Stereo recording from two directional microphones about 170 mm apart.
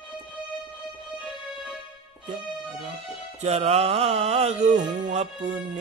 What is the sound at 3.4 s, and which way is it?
A man's voice, 40° right (ahead or behind).